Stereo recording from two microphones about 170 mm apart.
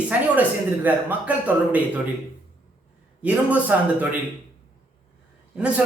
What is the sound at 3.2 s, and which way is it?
Speech, 10° right (ahead or behind).